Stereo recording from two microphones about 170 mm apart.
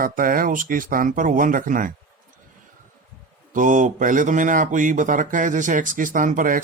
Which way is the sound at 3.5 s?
50° right (ahead or behind).